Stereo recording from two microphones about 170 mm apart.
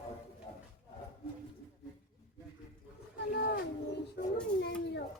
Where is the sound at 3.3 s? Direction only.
80° left.